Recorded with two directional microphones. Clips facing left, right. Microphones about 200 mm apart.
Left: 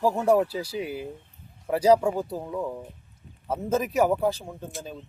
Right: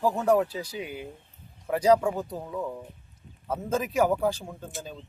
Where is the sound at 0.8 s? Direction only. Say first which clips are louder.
Left 6 dB; 35° left (ahead or behind).